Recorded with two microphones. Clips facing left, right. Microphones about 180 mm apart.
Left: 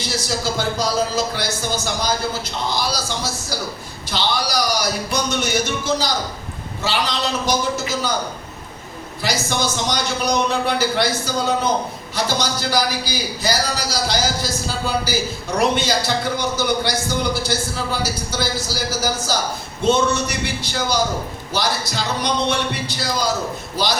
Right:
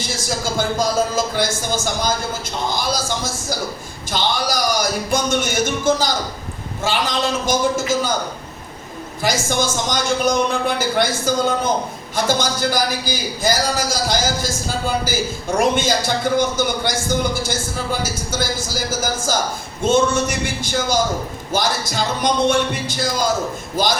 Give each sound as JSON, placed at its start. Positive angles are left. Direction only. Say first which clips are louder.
{"t": 0.8, "sound": "a man's voice", "louder": "right 2 dB", "side_deg": -50}
{"t": 9.2, "sound": "a man's voice", "louder": "right 2 dB", "side_deg": -50}